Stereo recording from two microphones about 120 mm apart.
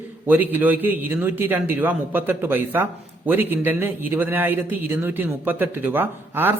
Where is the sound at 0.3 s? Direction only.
15° right (ahead or behind).